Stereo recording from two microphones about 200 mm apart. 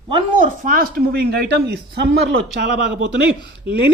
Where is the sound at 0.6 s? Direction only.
45° right (ahead or behind); by 3.1 s 60° right (ahead or behind).